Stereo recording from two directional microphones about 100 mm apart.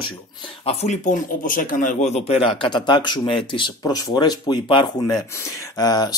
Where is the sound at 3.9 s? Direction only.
45° left (ahead or behind).